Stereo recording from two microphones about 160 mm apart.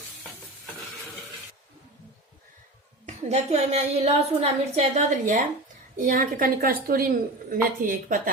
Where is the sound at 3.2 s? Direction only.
45° right (ahead or behind).